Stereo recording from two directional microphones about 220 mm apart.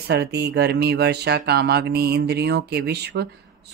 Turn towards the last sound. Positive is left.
turn(degrees=-50)  # may be behind; listen again after turning